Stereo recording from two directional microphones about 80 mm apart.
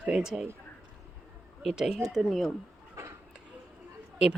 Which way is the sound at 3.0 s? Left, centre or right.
Right.